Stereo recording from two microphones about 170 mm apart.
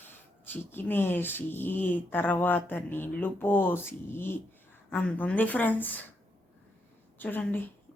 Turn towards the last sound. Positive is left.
turn(degrees=10)  # may be behind; listen again after turning